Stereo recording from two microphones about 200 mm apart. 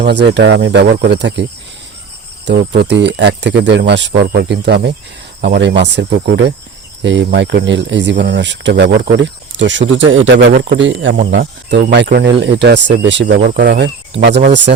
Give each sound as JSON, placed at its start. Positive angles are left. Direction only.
{"t": 0.0, "sound": "speech", "side_deg": -60}
{"t": 13.6, "sound": "speech", "side_deg": -60}